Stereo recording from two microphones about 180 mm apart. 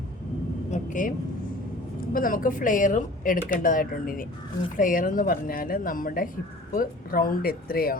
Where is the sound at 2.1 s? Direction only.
50° left (ahead or behind).